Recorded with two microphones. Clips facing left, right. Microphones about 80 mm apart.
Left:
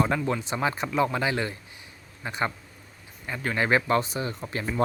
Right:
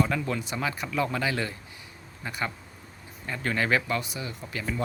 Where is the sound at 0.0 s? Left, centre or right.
Left.